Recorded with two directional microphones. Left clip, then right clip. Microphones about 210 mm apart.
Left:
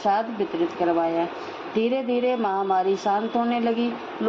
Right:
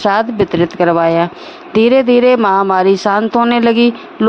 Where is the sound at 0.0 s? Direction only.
50° right (ahead or behind).